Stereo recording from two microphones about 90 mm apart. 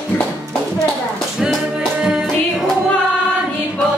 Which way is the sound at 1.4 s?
5° right (ahead or behind).